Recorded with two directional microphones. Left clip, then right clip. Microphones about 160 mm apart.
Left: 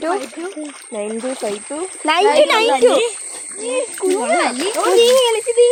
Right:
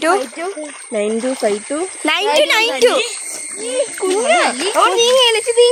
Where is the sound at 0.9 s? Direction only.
60° right (ahead or behind).